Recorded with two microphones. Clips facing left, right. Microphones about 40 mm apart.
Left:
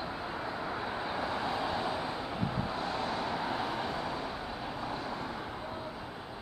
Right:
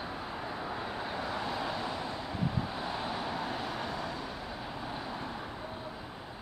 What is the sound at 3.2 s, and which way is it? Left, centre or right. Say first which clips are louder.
Vehicle: left 2 dB; centre.